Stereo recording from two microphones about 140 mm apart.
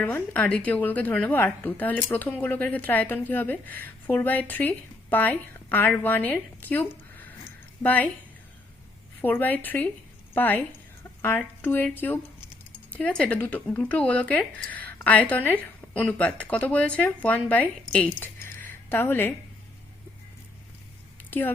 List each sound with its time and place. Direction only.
0.0 s a woman's voice: 10° left (ahead or behind)
9.2 s a woman's voice: 15° left (ahead or behind)
21.2 s a sound: 15° left (ahead or behind)